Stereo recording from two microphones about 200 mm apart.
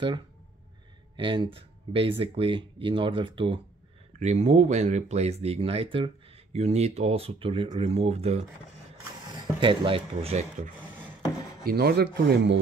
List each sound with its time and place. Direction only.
1.1 s speech: 25° right (ahead or behind)
9.6 s speech: 25° right (ahead or behind)
11.6 s rub: 50° right (ahead or behind)